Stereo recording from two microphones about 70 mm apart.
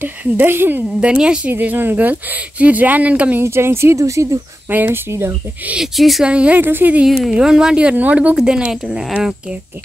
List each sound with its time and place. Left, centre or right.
0.0 s speech: right
1.0 s speech: centre
1.5 s speech: right
3.3 s speech: right
4.0 s speech: right
4.6 s speech: right
5.8 s speech: centre
6.2 s speech: centre
6.6 s speech: right
7.1 s speech: centre